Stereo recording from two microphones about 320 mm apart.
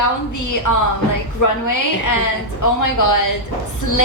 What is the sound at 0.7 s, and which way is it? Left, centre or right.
A woman's voice, left.